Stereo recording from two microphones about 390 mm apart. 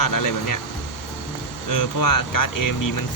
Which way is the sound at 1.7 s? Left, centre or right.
Left.